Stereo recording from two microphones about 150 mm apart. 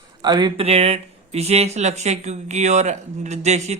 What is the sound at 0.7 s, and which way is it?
Speech, 45° right (ahead or behind).